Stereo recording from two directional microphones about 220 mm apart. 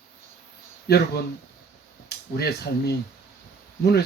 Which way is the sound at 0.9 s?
45° left (ahead or behind).